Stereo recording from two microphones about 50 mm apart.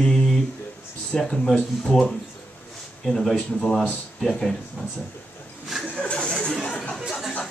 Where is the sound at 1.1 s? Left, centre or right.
Centre.